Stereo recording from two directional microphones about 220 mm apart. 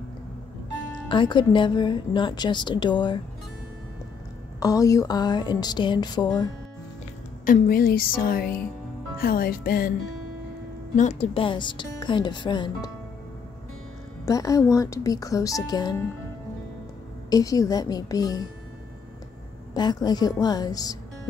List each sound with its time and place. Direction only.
1.0 s speech: 20° left (ahead or behind)
4.6 s speech: 15° left (ahead or behind)
7.4 s speech: 40° left (ahead or behind)
11.0 s speech: 30° left (ahead or behind)
14.2 s a woman's voice: 15° left (ahead or behind)
17.3 s a woman's voice: 15° left (ahead or behind)
19.7 s a woman's voice: 20° left (ahead or behind)